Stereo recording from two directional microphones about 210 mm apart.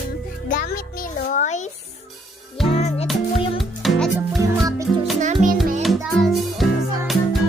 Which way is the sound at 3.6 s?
Centre (ahead or behind).